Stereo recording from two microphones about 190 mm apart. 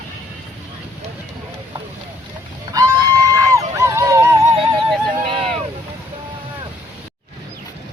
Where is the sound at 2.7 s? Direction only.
20° right (ahead or behind).